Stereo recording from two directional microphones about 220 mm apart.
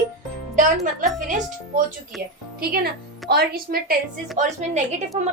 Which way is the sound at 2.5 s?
45° right (ahead or behind).